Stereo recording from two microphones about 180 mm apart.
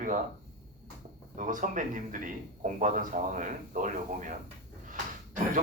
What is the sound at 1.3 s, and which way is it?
Speech, 45° right (ahead or behind).